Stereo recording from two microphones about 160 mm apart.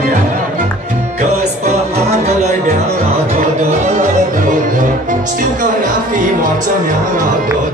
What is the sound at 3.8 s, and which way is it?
Music, 50° right (ahead or behind).